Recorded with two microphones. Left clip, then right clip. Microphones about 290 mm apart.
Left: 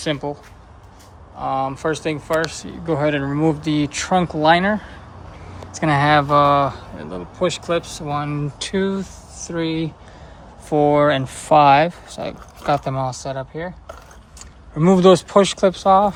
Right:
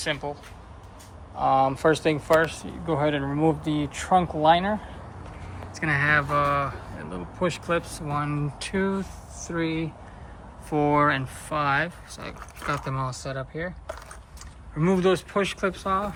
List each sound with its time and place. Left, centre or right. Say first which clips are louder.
0.0 s speech: left 5 dB; left
1.4 s speech: right 1 dB; centre